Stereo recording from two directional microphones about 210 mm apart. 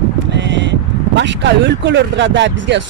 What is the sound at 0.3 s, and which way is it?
Speech, 60° right (ahead or behind).